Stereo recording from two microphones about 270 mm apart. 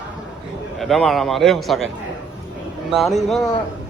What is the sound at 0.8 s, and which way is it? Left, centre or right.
A man's voice, centre.